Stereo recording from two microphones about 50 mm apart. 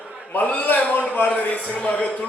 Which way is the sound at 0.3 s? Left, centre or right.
Left.